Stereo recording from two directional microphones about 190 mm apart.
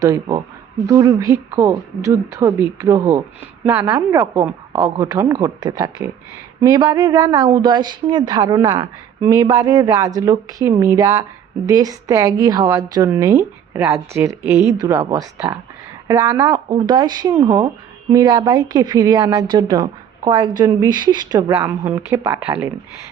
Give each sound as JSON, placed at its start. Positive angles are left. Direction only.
{"t": 0.0, "sound": "a woman's voice", "side_deg": -20}